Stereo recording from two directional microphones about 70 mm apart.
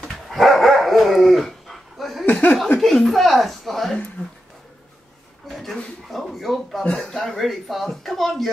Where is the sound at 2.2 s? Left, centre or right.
Centre.